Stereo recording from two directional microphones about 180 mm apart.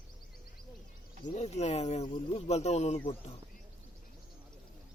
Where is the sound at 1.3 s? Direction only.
40° left (ahead or behind).